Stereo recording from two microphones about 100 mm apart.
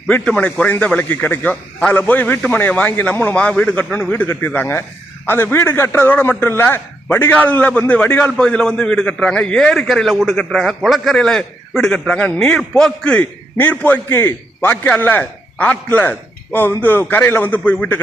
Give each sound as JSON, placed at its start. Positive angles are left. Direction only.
{"t": 0.1, "sound": "a man's voice", "side_deg": 15}